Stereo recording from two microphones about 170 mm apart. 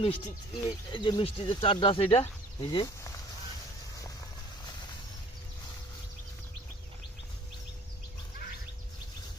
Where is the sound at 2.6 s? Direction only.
20° left (ahead or behind).